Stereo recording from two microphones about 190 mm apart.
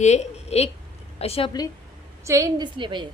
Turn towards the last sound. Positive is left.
turn(degrees=-25)  # may be behind; listen again after turning